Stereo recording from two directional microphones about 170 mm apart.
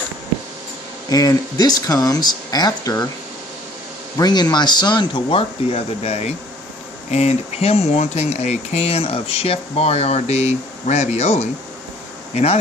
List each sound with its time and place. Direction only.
1.1 s speech: 20° left (ahead or behind)
4.2 s speech: 25° left (ahead or behind); by 12.5 s 40° left (ahead or behind)